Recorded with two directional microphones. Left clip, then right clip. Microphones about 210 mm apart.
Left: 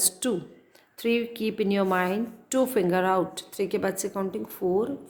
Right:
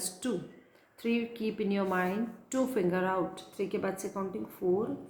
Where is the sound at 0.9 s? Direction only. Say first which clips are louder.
Left 7 dB; 50° left (ahead or behind).